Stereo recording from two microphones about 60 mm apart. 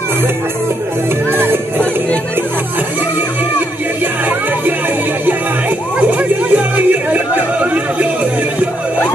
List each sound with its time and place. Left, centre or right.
1.3 s music: right
5.9 s music: right